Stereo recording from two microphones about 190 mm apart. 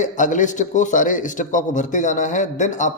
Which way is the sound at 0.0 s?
40° left (ahead or behind).